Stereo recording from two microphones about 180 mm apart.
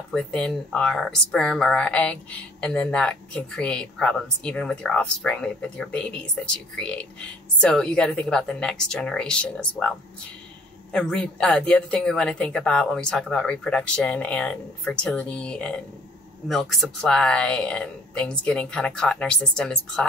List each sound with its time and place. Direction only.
0.1 s a woman's voice: 5° left (ahead or behind)